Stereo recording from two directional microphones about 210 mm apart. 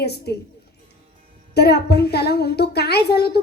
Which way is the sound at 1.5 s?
50° left (ahead or behind).